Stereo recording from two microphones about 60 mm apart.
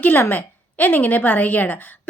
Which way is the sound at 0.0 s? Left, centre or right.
Left.